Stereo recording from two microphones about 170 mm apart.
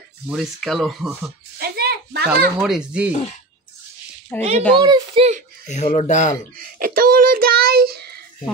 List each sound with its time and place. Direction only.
0.3 s speech: centre (ahead or behind)
1.6 s a sound: 65° right (ahead or behind)
2.6 s speech: 5° right (ahead or behind)
4.4 s a child's voice: 40° right (ahead or behind)
4.7 s a child's voice: 30° right (ahead or behind)
5.7 s speech: 45° left (ahead or behind)
6.6 s child singing: 55° right (ahead or behind)